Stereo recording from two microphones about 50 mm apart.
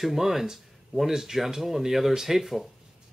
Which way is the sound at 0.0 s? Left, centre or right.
Centre.